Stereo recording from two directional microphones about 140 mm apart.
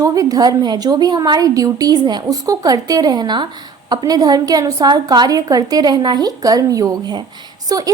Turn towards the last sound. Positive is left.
turn(degrees=-25)  # may be behind; listen again after turning